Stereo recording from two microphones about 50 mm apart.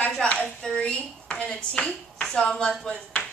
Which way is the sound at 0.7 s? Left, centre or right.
Left.